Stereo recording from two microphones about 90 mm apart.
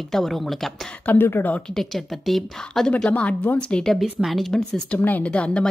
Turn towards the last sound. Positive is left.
turn(degrees=10)  # may be behind; listen again after turning